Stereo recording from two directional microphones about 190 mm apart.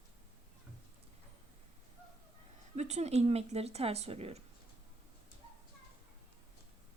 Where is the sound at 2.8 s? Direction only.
35° right (ahead or behind).